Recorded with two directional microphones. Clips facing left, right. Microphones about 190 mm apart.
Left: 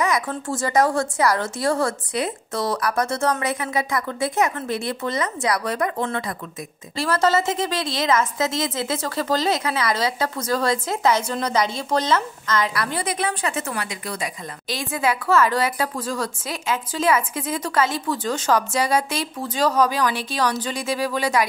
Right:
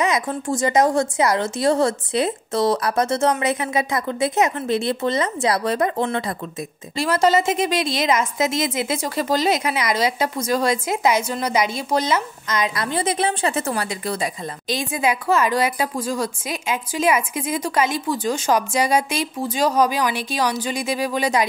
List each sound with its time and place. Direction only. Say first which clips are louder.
0.0 s speech: right 2 dB; 20° right (ahead or behind)
7.0 s a woman's voice: right 2 dB; 15° right (ahead or behind); by 14.3 s 30° right (ahead or behind)
14.7 s a woman's voice: right 2 dB; 15° right (ahead or behind)